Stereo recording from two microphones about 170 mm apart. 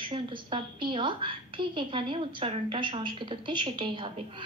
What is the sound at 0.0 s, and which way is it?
A woman's voice, 30° right (ahead or behind).